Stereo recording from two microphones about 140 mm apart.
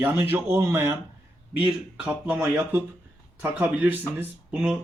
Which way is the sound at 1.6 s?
5° right (ahead or behind).